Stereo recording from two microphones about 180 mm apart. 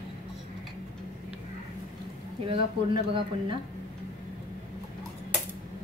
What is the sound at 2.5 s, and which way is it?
Speech, 30° right (ahead or behind).